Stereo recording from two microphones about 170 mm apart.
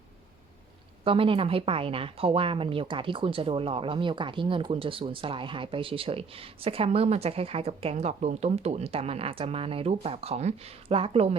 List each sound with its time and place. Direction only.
1.0 s speech: 30° right (ahead or behind)